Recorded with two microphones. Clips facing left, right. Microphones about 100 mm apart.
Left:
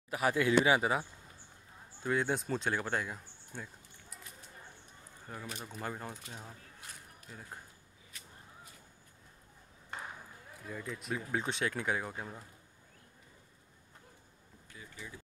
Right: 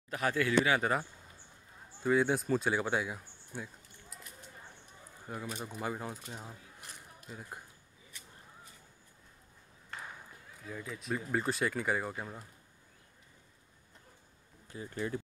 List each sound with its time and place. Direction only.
0.1 s speech: 15° left (ahead or behind)
2.0 s speech: centre (ahead or behind)
5.2 s speech: 10° right (ahead or behind)
10.6 s speech: centre (ahead or behind)
15.0 s speech: 60° right (ahead or behind)